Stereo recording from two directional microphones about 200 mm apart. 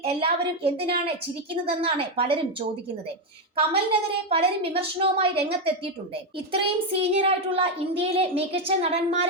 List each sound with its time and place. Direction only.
0.0 s a child's voice: 30° right (ahead or behind)